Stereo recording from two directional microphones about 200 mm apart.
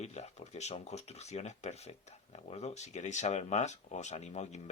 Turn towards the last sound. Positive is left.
turn(degrees=35)  # may be behind; listen again after turning